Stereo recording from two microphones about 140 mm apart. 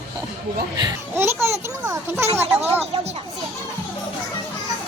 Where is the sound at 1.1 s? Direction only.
20° right (ahead or behind).